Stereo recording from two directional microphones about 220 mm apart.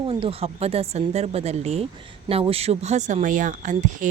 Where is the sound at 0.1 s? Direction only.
25° right (ahead or behind).